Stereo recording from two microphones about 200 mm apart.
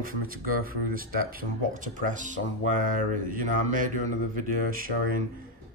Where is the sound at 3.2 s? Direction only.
40° right (ahead or behind).